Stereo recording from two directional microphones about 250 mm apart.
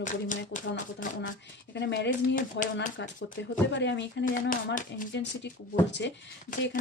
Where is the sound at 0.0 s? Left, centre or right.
Left.